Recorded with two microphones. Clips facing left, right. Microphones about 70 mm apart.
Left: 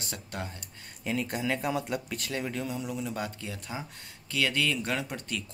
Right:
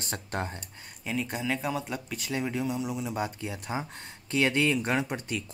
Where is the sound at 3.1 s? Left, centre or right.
Right.